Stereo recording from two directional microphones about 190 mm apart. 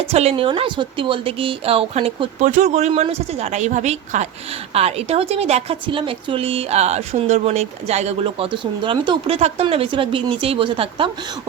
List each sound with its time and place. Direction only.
0.1 s a woman's voice: 35° right (ahead or behind)
2.4 s a woman's voice: 40° right (ahead or behind)